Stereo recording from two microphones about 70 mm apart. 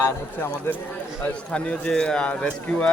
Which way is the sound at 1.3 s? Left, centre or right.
Centre.